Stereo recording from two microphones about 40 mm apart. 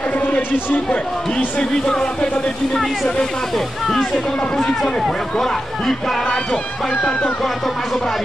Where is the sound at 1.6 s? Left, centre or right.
Centre.